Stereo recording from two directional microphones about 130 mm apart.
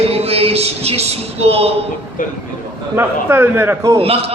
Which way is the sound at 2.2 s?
90° left.